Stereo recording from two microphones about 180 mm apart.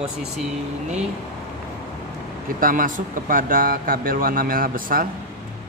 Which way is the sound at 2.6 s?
50° right (ahead or behind).